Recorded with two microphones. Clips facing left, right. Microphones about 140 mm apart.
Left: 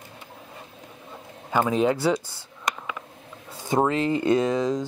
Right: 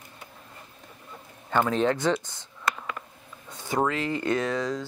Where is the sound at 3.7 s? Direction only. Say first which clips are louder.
Left 4 dB; 25° left (ahead or behind).